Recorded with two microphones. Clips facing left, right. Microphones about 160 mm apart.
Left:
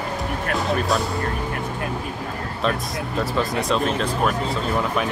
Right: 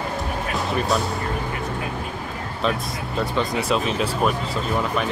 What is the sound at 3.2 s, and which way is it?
Speech, centre (ahead or behind).